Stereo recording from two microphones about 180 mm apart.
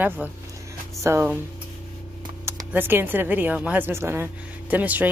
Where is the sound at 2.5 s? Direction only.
15° right (ahead or behind).